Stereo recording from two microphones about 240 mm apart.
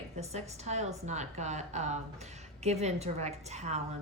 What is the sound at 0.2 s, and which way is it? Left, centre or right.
A woman's voice, right.